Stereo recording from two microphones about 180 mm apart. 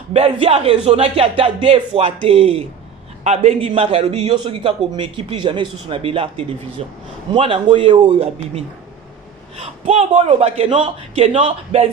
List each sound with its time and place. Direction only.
0.1 s a man's voice: 35° right (ahead or behind)